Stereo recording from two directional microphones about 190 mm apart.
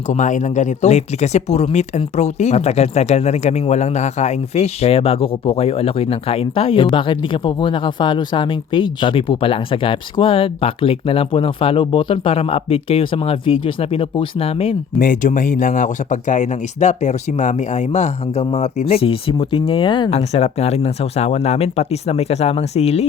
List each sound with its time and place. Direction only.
0.1 s speech: 40° left (ahead or behind)
14.9 s speech: 45° left (ahead or behind)